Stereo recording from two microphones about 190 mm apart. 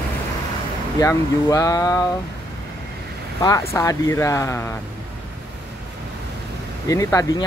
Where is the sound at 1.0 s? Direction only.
15° left (ahead or behind).